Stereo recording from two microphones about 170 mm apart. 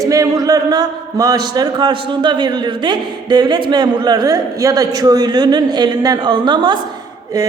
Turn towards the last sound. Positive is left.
turn(degrees=-25)  # may be behind; listen again after turning